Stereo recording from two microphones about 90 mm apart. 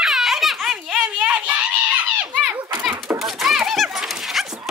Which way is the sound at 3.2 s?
Centre (ahead or behind).